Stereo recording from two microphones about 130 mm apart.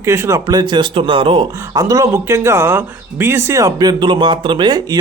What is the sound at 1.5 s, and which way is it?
Speech, 25° right (ahead or behind).